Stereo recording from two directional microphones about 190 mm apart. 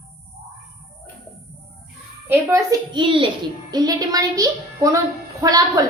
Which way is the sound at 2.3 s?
15° right (ahead or behind).